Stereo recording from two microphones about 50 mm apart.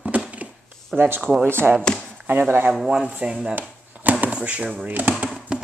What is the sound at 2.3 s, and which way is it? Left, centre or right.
Speech, right.